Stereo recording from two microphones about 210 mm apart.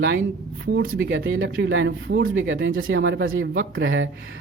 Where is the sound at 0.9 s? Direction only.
65° right (ahead or behind).